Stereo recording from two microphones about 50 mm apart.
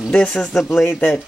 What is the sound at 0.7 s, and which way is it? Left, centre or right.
Speech, left.